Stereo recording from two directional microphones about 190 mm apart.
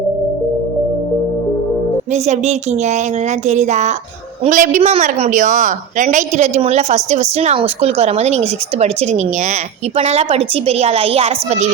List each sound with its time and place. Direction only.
2.1 s a woman's voice: 35° right (ahead or behind)